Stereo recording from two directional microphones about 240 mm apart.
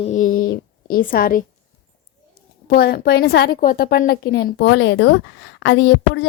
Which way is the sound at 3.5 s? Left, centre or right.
Left.